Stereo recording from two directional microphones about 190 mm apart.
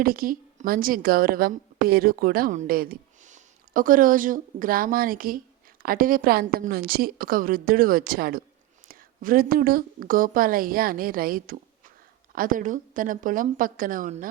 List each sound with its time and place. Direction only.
0.0 s a woman's voice: 50° right (ahead or behind)